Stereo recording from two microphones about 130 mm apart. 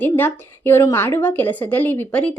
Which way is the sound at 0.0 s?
15° left (ahead or behind).